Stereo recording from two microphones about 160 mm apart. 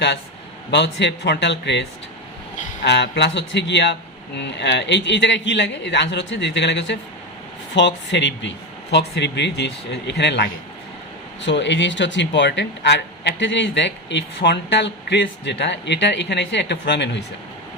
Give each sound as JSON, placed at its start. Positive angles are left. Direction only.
{"t": 0.7, "sound": "speech", "side_deg": 90}